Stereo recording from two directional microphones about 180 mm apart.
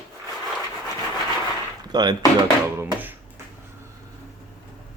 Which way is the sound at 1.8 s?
25° right (ahead or behind).